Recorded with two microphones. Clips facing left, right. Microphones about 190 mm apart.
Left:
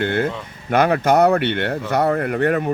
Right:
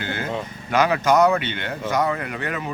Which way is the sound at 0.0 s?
60° left (ahead or behind).